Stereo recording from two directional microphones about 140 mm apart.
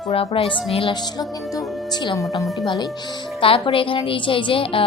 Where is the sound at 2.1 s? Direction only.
25° left (ahead or behind).